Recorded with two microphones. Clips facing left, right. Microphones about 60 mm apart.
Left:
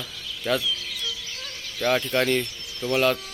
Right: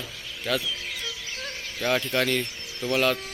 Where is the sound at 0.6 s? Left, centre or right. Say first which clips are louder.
Left 2 dB; right.